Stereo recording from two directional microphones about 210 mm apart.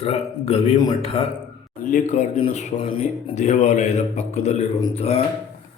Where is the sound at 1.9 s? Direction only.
35° left (ahead or behind).